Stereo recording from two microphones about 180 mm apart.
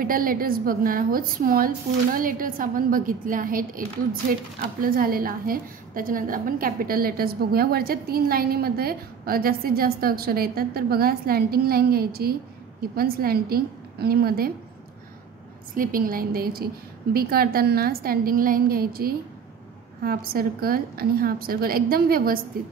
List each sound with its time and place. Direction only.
0.0 s a woman's voice: 50° right (ahead or behind)
15.7 s a woman's voice: 50° right (ahead or behind)